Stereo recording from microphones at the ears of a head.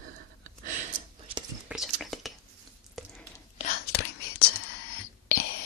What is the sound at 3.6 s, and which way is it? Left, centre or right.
Whispering, left.